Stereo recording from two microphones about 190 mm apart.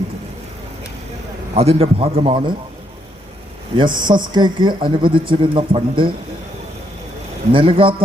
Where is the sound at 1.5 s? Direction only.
30° right (ahead or behind).